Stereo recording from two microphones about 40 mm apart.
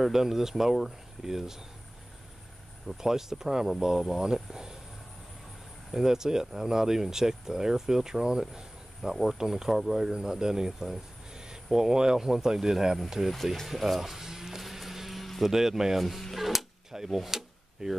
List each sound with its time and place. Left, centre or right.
0.0 s speech: centre
3.0 s speech: centre
5.9 s speech: centre
11.3 s a sound: centre
12.2 s speech: centre
13.7 s music: centre
15.4 s speech: centre